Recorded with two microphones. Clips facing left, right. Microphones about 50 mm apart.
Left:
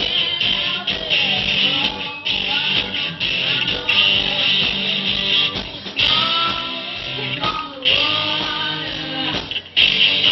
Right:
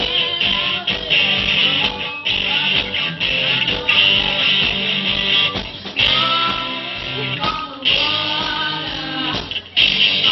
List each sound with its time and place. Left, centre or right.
0.4 s music: right
3.8 s music: right
6.0 s music: centre
7.4 s music: centre
9.8 s music: centre